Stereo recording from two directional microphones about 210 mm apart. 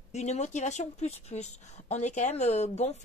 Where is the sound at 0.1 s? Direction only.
30° left (ahead or behind).